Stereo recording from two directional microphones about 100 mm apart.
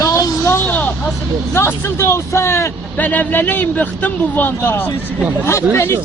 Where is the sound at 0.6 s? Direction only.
15° left (ahead or behind).